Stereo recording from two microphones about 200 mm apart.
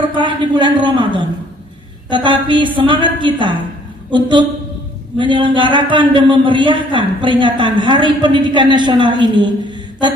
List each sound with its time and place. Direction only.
0.1 s a man's voice: 25° right (ahead or behind)